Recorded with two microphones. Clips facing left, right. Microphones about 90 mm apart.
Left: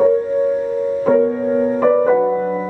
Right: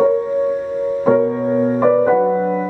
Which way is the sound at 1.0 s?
10° right (ahead or behind).